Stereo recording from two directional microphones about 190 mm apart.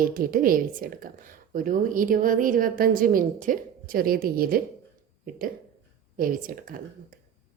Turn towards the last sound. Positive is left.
turn(degrees=-45)  # may be behind; listen again after turning